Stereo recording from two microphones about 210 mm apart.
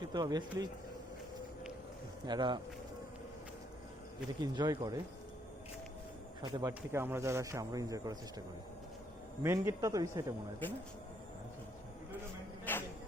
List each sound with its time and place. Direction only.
0.0 s speech: 20° right (ahead or behind)
2.2 s speech: 20° right (ahead or behind)
4.4 s speech: 20° right (ahead or behind)
6.4 s speech: 20° right (ahead or behind)
9.4 s speech: 10° right (ahead or behind)
12.7 s a sound: 10° left (ahead or behind)